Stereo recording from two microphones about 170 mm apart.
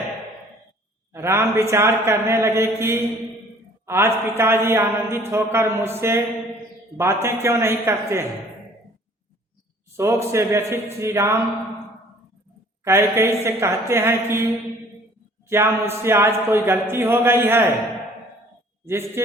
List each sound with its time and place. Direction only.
1.1 s a man's voice: 15° right (ahead or behind)
10.0 s a man's voice: 15° right (ahead or behind)
12.8 s a man's voice: 15° right (ahead or behind)
15.4 s a man's voice: 15° right (ahead or behind)
18.9 s a man's voice: 15° right (ahead or behind)